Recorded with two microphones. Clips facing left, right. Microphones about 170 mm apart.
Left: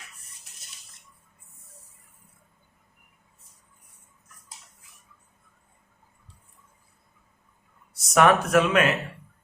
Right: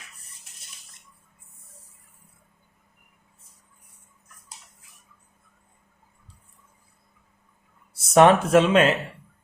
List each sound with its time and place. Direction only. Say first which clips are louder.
7.9 s speech: right 4 dB; 30° right (ahead or behind)